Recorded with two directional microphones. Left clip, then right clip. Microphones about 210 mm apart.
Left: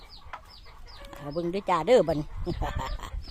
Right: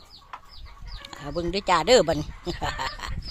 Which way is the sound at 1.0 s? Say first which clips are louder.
Right 2 dB; centre (ahead or behind).